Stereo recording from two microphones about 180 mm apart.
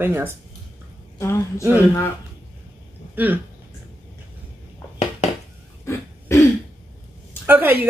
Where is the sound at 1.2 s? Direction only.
15° left (ahead or behind).